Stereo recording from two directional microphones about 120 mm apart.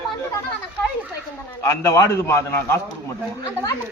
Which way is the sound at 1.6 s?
25° left (ahead or behind).